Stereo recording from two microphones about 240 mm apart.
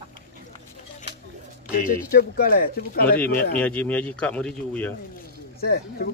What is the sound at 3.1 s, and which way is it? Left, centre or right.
Speech, centre.